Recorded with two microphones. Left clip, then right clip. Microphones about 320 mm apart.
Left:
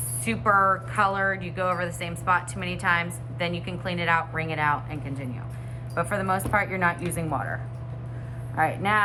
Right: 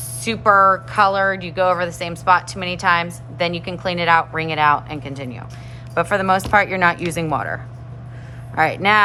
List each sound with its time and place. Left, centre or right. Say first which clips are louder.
0.3 s a woman's voice: right 8 dB; centre